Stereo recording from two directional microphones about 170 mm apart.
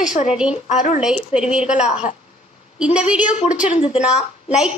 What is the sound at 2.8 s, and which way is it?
Speech, 5° right (ahead or behind).